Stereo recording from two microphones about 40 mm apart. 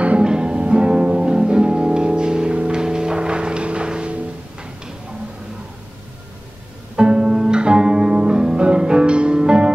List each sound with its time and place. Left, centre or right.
0.2 s music: right
7.0 s music: right